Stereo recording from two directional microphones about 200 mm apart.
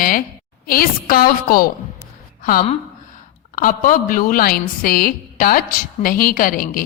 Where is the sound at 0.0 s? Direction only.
45° left (ahead or behind).